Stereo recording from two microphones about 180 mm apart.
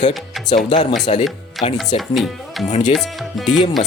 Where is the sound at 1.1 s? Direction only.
30° left (ahead or behind).